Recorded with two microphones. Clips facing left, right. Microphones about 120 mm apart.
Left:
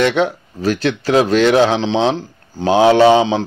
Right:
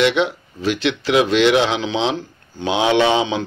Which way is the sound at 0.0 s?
40° left (ahead or behind).